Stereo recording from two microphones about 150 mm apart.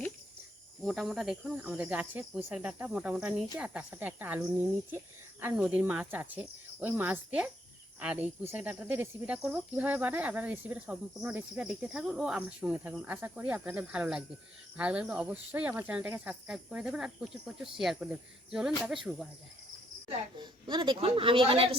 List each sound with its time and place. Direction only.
0.9 s speech: centre (ahead or behind)
20.4 s a woman's voice: 30° right (ahead or behind)